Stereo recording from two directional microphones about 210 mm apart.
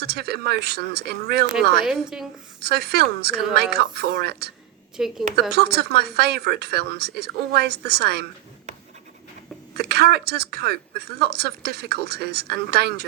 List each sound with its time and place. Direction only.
0.0 s speech: 50° right (ahead or behind)
1.8 s a woman's voice: centre (ahead or behind)
2.6 s speech: 50° right (ahead or behind)
4.9 s a woman's voice: centre (ahead or behind)
5.5 s speech: 50° right (ahead or behind)
9.7 s speech: 50° right (ahead or behind)